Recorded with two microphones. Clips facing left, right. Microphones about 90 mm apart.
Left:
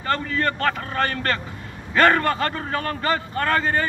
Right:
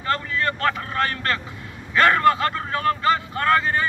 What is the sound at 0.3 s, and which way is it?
A man's voice, 45° left (ahead or behind).